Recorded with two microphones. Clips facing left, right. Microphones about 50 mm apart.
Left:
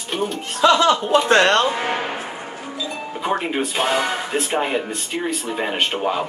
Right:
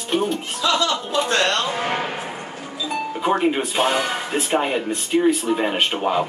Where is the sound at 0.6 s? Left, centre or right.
Left.